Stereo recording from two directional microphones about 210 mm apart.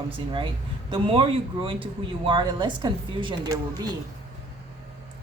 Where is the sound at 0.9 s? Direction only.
25° right (ahead or behind).